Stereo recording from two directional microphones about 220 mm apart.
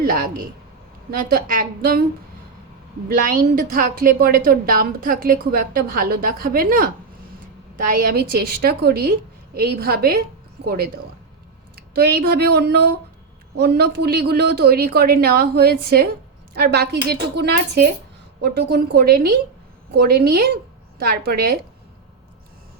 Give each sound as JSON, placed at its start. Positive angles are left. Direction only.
{"t": 0.0, "sound": "a woman's voice", "side_deg": -40}
{"t": 1.3, "sound": "a woman's voice", "side_deg": -40}
{"t": 3.2, "sound": "a woman's voice", "side_deg": -40}